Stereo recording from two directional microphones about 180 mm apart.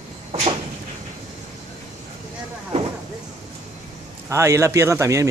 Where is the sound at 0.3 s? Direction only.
30° right (ahead or behind).